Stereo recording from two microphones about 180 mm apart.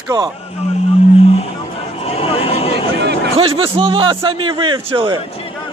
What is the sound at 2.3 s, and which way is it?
Vehicle, 30° left (ahead or behind).